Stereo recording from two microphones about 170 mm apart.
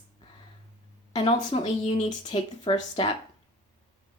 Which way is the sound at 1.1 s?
35° left (ahead or behind).